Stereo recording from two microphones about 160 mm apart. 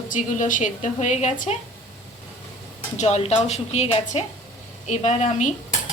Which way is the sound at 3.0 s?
45° left (ahead or behind).